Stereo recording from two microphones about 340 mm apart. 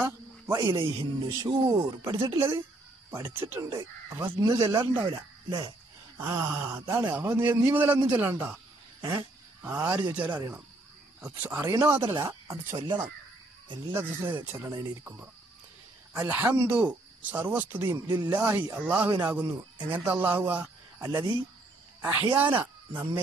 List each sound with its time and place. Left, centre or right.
0.0 s speech: centre